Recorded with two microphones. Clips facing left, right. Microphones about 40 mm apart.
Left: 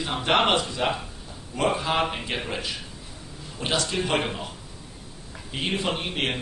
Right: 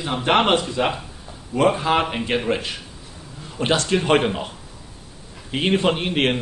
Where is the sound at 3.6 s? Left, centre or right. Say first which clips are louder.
Right 7 dB; right.